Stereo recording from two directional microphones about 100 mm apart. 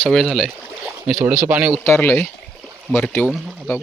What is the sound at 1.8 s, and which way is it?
Speech, 20° left (ahead or behind).